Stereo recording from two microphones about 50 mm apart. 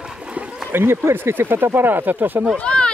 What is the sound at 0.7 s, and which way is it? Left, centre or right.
Speech, right.